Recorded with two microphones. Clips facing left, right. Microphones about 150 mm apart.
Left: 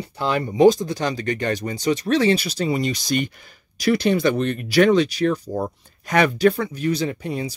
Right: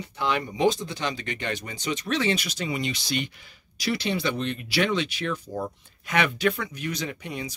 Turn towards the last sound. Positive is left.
turn(degrees=35)  # may be behind; listen again after turning